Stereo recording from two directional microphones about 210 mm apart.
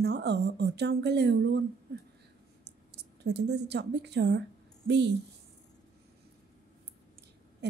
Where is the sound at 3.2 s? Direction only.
55° right (ahead or behind).